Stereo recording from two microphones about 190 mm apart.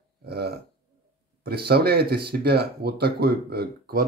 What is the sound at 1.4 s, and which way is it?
Speech, 55° right (ahead or behind).